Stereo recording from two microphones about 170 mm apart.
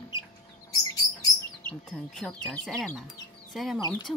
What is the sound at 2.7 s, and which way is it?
Speech, centre (ahead or behind).